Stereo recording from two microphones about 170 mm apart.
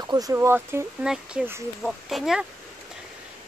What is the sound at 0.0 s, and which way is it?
Speech, 20° right (ahead or behind).